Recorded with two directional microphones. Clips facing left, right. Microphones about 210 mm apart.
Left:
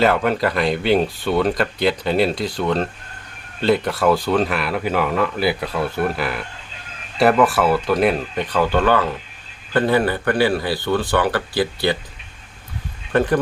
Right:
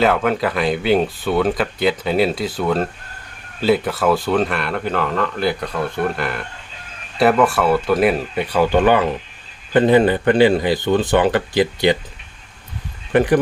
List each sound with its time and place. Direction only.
0.0 s speech: centre (ahead or behind); by 11.9 s 20° right (ahead or behind)
13.1 s speech: 15° right (ahead or behind)